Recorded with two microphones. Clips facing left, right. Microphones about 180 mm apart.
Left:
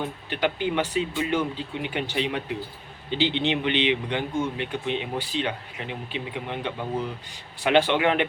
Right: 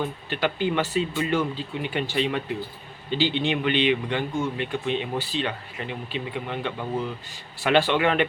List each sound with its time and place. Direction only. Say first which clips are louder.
0.3 s speech: even; 15° left (ahead or behind)